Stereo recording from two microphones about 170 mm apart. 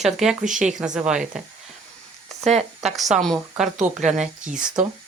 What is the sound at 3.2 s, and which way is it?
Speech, centre (ahead or behind).